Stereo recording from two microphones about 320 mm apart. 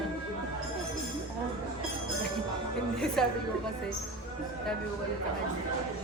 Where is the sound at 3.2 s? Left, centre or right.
Centre.